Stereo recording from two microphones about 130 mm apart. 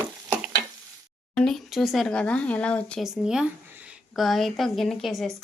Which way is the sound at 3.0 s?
5° right (ahead or behind).